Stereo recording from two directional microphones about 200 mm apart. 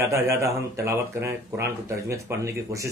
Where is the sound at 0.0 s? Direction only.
15° right (ahead or behind).